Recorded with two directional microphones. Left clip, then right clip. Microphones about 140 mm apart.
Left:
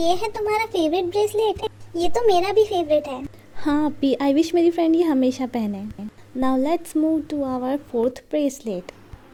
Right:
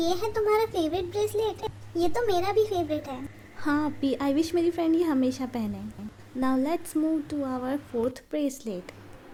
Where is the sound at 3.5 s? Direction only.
35° left (ahead or behind).